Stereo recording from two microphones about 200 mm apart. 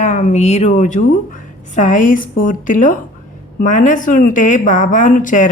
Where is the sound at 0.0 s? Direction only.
40° left (ahead or behind).